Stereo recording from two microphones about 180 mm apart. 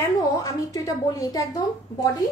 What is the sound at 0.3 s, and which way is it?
A woman's voice, 20° left (ahead or behind).